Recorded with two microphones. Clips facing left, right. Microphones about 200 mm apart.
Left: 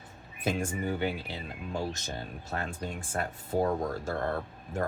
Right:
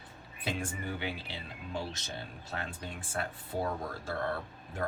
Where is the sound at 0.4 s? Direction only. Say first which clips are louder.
Left 6 dB; 45° left (ahead or behind).